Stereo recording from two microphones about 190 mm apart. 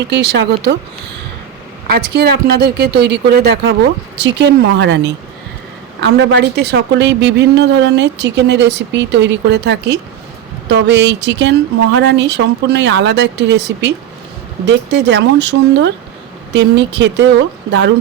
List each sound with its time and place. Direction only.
0.0 s a woman's voice: 65° right (ahead or behind)
1.9 s a woman's voice: 60° right (ahead or behind)
4.2 s a woman's voice: 65° right (ahead or behind)